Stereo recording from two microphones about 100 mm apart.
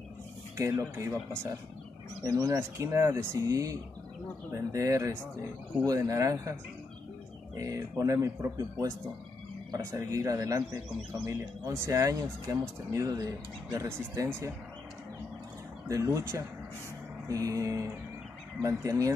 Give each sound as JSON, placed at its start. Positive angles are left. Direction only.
{"t": 0.6, "sound": "speech", "side_deg": -25}
{"t": 2.2, "sound": "speech", "side_deg": -35}
{"t": 7.5, "sound": "speech", "side_deg": -35}
{"t": 15.9, "sound": "speech", "side_deg": -35}